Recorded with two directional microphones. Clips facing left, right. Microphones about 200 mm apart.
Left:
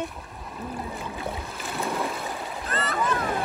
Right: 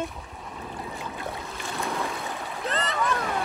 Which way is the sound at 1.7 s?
Centre (ahead or behind).